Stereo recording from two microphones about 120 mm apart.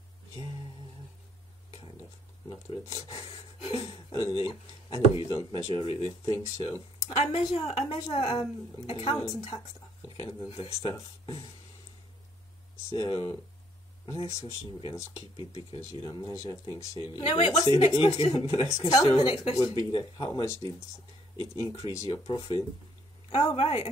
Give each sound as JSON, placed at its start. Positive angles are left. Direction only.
{"t": 2.9, "sound": "a sound", "side_deg": 55}
{"t": 4.3, "sound": "speech", "side_deg": 45}
{"t": 7.3, "sound": "a woman's voice", "side_deg": 55}
{"t": 9.1, "sound": "speech", "side_deg": 35}
{"t": 10.5, "sound": "speech", "side_deg": 50}
{"t": 12.9, "sound": "speech", "side_deg": 40}
{"t": 14.0, "sound": "speech", "side_deg": 25}
{"t": 17.3, "sound": "a woman's voice", "side_deg": 60}
{"t": 17.7, "sound": "speech", "side_deg": 45}
{"t": 18.9, "sound": "speech", "side_deg": 35}
{"t": 20.4, "sound": "speech", "side_deg": 25}
{"t": 22.2, "sound": "speech", "side_deg": 40}
{"t": 23.5, "sound": "a woman's voice", "side_deg": 65}